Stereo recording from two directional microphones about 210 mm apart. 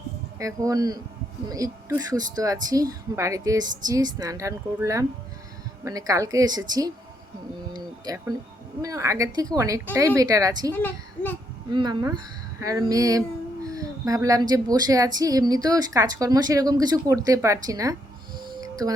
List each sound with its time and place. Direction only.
0.3 s speech: 15° right (ahead or behind)
7.7 s a sound: 20° right (ahead or behind)
8.8 s speech: 15° right (ahead or behind)
10.8 s a child's voice: 10° left (ahead or behind)
11.7 s speech: 20° right (ahead or behind)
18.3 s music: 20° right (ahead or behind)